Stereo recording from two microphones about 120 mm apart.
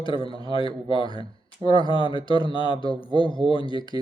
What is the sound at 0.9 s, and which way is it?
A man's voice, 45° left (ahead or behind).